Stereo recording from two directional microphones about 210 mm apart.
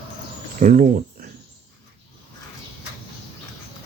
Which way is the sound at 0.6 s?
40° right (ahead or behind).